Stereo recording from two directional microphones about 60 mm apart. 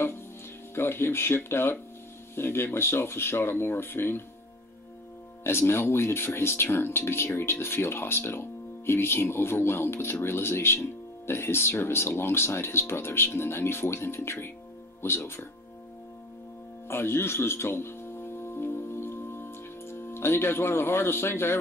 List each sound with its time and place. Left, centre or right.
0.7 s speech: left
5.4 s speech: left
16.8 s music: left